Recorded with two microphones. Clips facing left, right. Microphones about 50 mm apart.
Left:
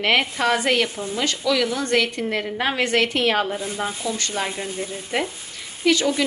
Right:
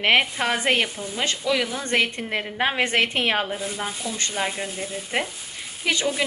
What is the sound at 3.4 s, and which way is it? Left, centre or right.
A woman's voice, centre.